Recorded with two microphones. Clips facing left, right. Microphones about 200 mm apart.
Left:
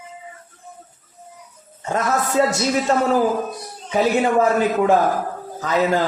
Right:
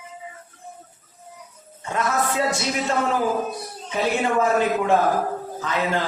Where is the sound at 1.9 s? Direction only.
40° left (ahead or behind).